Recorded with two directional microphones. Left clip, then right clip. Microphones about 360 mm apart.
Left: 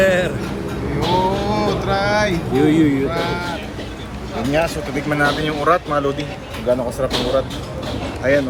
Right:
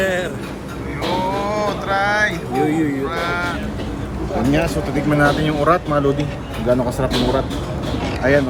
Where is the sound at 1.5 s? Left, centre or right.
Centre.